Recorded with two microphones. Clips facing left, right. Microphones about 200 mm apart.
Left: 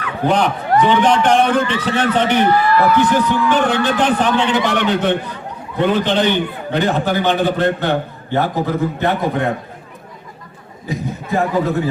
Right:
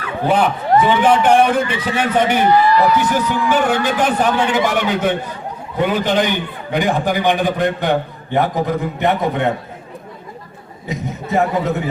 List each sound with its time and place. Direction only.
0.3 s a man's voice: 5° right (ahead or behind)
10.8 s a man's voice: 20° right (ahead or behind)